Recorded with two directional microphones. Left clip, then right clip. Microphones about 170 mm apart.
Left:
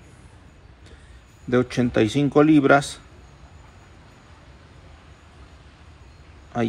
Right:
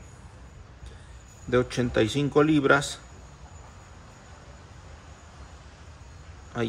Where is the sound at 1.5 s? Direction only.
40° left (ahead or behind).